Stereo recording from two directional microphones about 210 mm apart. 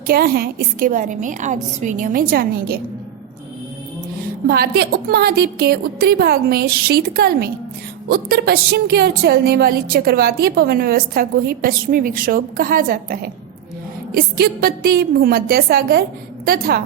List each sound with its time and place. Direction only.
0.1 s a woman's voice: 45° right (ahead or behind)
4.4 s a woman's voice: 45° right (ahead or behind)